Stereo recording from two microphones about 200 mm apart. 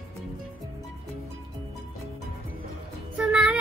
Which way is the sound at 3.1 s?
5° right (ahead or behind).